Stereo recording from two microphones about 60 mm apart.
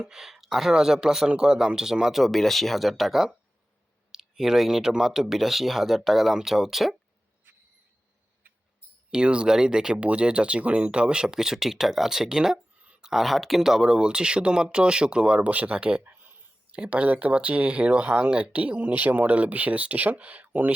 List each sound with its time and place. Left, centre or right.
0.0 s speech: centre
9.0 s speech: centre
16.0 s a sound: right
16.7 s speech: right